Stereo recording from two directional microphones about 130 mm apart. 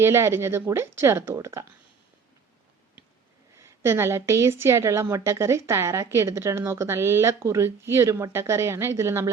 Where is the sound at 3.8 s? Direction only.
20° right (ahead or behind).